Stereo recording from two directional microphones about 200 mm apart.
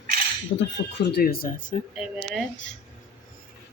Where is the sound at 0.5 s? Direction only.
55° left (ahead or behind).